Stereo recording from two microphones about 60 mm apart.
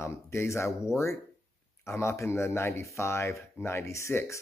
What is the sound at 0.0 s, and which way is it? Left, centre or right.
Speech, left.